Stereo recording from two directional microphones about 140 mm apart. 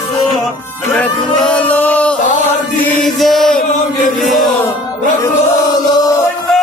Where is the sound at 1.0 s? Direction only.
10° left (ahead or behind).